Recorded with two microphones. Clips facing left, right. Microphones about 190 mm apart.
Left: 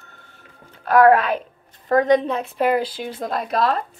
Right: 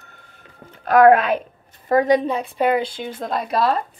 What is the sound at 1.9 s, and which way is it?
A woman's voice, 5° right (ahead or behind).